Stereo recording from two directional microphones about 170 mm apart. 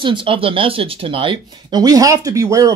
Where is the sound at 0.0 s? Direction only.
30° right (ahead or behind).